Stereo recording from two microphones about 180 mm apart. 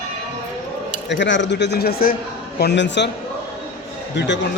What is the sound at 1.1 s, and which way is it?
Speech, 80° left.